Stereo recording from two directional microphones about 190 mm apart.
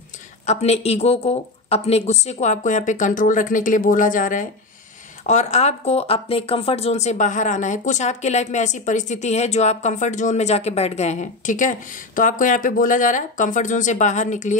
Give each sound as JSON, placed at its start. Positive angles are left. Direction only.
{"t": 0.5, "sound": "speech", "side_deg": 35}